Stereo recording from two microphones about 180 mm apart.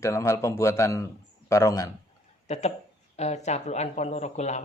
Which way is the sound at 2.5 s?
40° left (ahead or behind).